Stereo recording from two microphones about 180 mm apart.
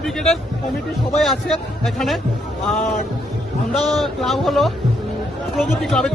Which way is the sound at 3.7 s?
Centre (ahead or behind).